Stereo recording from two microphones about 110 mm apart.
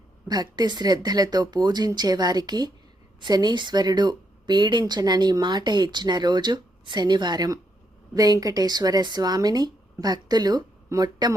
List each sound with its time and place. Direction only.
0.3 s speech: 40° right (ahead or behind)